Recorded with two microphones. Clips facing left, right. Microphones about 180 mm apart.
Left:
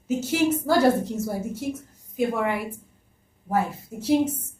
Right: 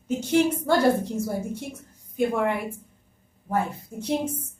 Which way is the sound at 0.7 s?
Centre (ahead or behind).